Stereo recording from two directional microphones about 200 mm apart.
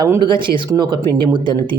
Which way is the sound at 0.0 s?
20° right (ahead or behind).